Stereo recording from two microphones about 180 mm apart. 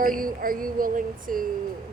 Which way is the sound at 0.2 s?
50° right (ahead or behind).